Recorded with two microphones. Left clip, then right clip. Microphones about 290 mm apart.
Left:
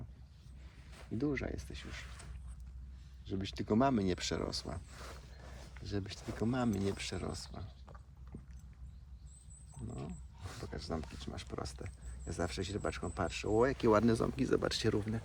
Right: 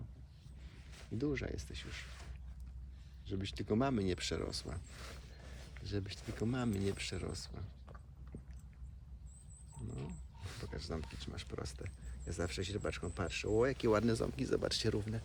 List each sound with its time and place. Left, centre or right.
0.9 s speech: centre
3.2 s speech: centre
9.9 s speech: centre; by 15.2 s left